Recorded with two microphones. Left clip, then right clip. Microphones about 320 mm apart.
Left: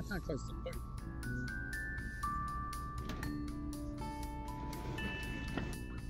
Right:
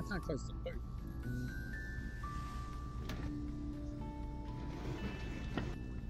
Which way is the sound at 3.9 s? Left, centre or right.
Left.